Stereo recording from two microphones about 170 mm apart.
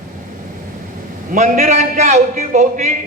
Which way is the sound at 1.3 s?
45° right (ahead or behind).